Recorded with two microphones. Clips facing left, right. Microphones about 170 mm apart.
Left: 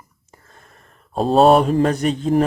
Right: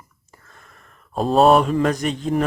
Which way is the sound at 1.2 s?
30° left (ahead or behind).